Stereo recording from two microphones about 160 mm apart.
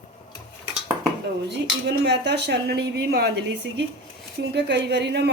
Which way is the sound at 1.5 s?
90° right.